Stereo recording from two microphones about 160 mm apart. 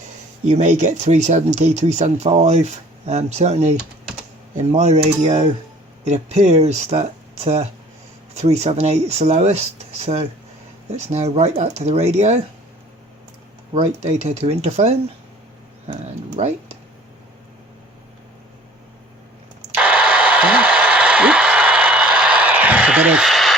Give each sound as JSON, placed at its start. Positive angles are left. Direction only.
{"t": 0.4, "sound": "speech", "side_deg": -45}
{"t": 13.7, "sound": "speech", "side_deg": -40}
{"t": 19.7, "sound": "a sound", "side_deg": -10}